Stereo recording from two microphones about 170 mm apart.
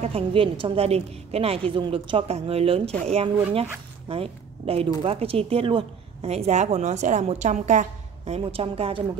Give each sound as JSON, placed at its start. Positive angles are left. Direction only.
{"t": 0.0, "sound": "a woman's voice", "side_deg": -35}